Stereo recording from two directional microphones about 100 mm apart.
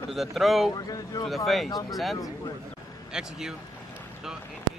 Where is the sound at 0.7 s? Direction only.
40° left (ahead or behind).